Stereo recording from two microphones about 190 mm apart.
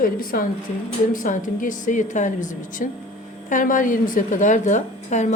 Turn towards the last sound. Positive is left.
turn(degrees=40)  # may be behind; listen again after turning